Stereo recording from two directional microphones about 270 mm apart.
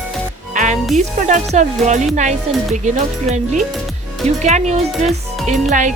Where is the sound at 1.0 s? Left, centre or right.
Right.